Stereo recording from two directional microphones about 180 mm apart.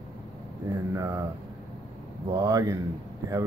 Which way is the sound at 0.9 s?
15° right (ahead or behind).